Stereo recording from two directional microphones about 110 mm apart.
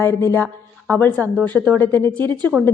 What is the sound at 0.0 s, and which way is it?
Speech, 25° left (ahead or behind).